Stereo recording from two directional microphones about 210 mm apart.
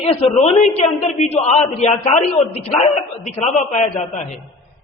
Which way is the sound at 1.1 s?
30° left (ahead or behind).